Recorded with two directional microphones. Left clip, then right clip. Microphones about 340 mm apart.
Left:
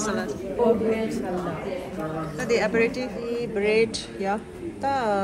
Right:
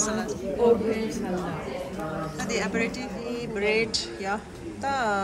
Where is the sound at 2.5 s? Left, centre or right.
Centre.